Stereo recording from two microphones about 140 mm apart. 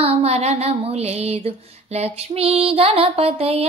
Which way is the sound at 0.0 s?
45° right (ahead or behind).